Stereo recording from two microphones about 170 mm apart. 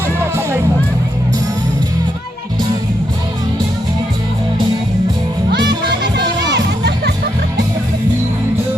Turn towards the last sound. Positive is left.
turn(degrees=-85)